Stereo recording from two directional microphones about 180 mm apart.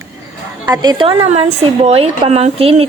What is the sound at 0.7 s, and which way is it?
A woman's voice, 20° right (ahead or behind).